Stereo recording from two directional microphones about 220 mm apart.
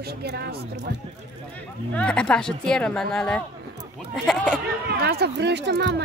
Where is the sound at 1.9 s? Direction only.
5° left (ahead or behind).